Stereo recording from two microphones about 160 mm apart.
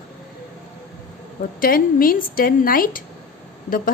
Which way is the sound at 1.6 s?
65° left (ahead or behind).